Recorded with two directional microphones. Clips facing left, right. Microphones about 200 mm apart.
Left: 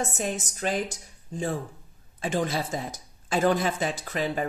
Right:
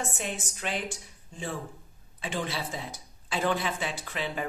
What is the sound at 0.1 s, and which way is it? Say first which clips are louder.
Speech: left 5 dB; 40° left (ahead or behind).